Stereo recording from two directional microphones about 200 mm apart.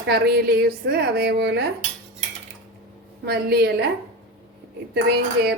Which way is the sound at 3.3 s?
50° right (ahead or behind).